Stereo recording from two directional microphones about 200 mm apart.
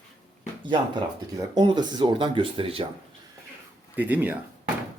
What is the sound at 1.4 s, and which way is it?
Speech, 20° right (ahead or behind).